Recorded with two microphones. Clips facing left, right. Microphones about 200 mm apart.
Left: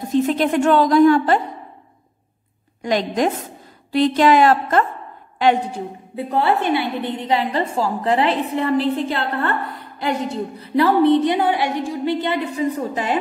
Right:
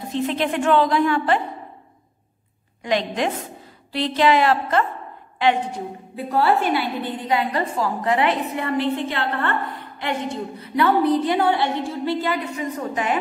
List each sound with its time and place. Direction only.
0.1 s a woman's voice: 40° left (ahead or behind)
2.8 s a woman's voice: 40° left (ahead or behind)
6.1 s a woman's voice: 20° left (ahead or behind)